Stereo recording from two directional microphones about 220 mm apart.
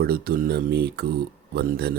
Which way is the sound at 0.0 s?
45° right (ahead or behind).